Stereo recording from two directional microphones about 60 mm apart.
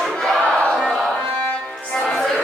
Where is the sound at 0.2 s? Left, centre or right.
Centre.